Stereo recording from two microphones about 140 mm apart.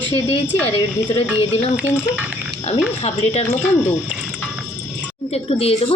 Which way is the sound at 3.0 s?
50° left (ahead or behind).